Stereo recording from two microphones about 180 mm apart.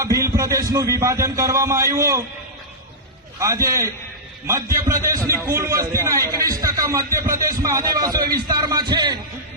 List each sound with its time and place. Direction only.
0.0 s a man's voice: 20° right (ahead or behind)
3.4 s a man's voice: 20° right (ahead or behind)